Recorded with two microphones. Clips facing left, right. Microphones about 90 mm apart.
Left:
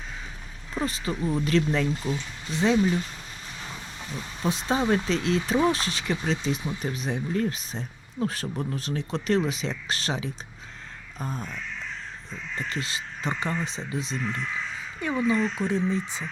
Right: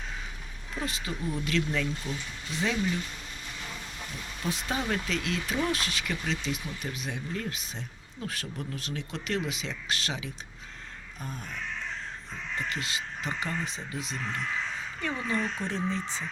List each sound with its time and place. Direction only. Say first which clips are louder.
0.8 s speech: left 6 dB; 35° left (ahead or behind)
4.4 s speech: left 7 dB; 25° left (ahead or behind)
12.6 s speech: left 2 dB; 35° left (ahead or behind)
15.0 s speech: left 7 dB; 15° left (ahead or behind)